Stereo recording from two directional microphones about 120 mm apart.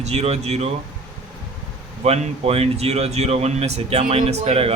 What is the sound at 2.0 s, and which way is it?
Speech, 60° right (ahead or behind).